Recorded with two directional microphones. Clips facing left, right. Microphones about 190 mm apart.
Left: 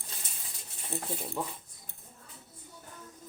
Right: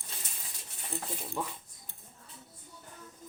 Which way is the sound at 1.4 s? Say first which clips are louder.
Even; 25° left (ahead or behind).